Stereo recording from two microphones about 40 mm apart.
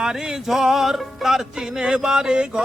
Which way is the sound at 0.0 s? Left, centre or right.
Centre.